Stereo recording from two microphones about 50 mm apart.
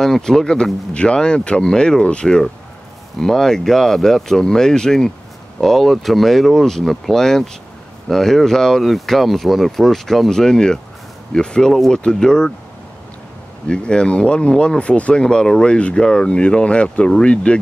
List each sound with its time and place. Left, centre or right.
0.0 s speech: centre
13.7 s speech: centre